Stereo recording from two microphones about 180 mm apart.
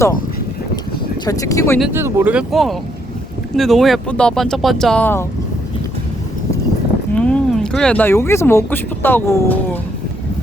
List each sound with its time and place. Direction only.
1.2 s speech: 20° left (ahead or behind)
1.9 s speech: 15° right (ahead or behind); by 5.2 s 10° left (ahead or behind)
7.1 s speech: 5° left (ahead or behind)